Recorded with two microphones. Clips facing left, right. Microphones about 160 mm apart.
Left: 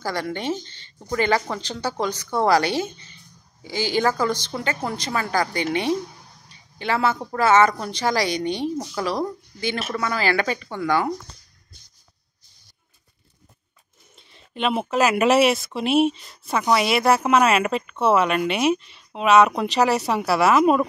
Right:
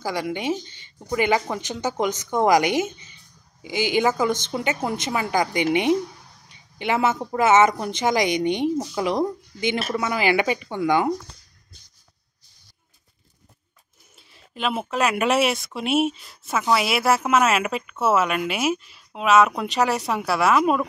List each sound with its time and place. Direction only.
0.0 s a woman's voice: 10° right (ahead or behind)
6.5 s a sound: 20° right (ahead or behind)
7.2 s a woman's voice: 15° right (ahead or behind)
14.1 s speech: centre (ahead or behind)